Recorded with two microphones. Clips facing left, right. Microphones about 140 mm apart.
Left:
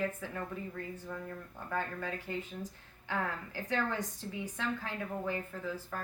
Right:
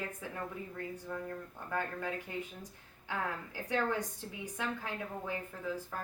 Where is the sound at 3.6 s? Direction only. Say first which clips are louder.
Right 1 dB; 10° right (ahead or behind).